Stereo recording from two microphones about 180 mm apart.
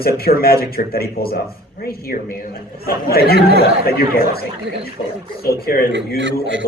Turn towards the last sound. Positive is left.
turn(degrees=-90)